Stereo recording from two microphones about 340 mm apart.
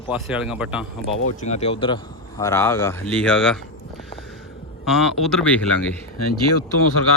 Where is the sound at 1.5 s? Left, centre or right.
Centre.